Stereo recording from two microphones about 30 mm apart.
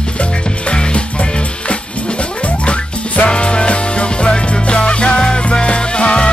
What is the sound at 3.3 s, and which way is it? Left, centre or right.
Music, left.